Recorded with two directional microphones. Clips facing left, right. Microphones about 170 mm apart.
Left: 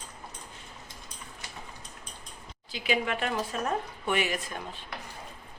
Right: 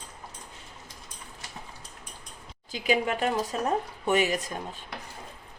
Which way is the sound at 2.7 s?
45° right (ahead or behind).